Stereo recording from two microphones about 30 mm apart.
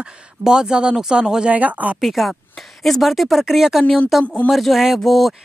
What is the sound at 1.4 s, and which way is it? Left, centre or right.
Speech, right.